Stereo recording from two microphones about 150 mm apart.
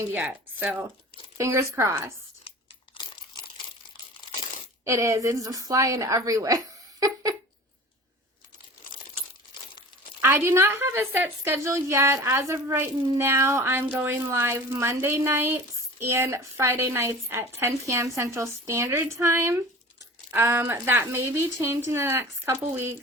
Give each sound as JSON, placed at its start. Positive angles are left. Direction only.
{"t": 0.1, "sound": "speech", "side_deg": -10}
{"t": 2.9, "sound": "crumpling", "side_deg": 35}
{"t": 4.9, "sound": "a woman's voice", "side_deg": -20}
{"t": 10.2, "sound": "speech", "side_deg": -15}